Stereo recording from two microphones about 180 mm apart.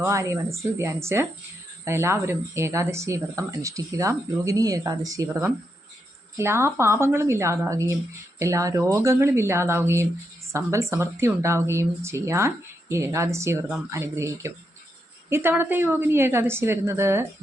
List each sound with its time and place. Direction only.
0.0 s speech: 15° right (ahead or behind)